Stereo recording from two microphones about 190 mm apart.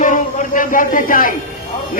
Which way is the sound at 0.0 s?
45° left (ahead or behind).